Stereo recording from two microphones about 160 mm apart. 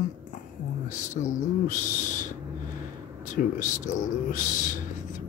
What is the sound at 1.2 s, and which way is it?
Speech, 55° left (ahead or behind).